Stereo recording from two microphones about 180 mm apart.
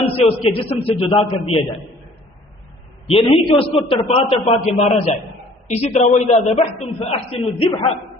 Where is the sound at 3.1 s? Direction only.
30° left (ahead or behind).